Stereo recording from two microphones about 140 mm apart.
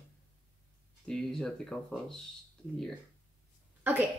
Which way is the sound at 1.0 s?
5° left (ahead or behind).